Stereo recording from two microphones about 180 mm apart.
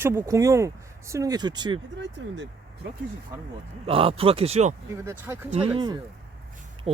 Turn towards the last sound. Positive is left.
turn(degrees=-35)  # may be behind; listen again after turning